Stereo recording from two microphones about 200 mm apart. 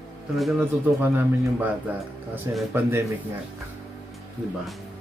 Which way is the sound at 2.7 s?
10° right (ahead or behind).